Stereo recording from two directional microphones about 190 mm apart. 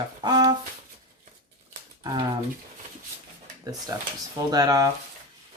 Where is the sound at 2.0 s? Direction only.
25° right (ahead or behind).